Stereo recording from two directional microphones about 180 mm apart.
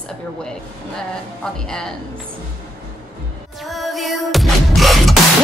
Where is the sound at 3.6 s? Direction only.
Centre (ahead or behind).